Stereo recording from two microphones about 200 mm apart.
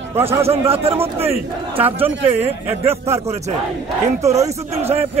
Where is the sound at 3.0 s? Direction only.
15° right (ahead or behind).